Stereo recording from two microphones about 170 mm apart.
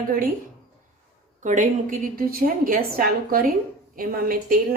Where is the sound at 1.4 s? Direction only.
50° right (ahead or behind).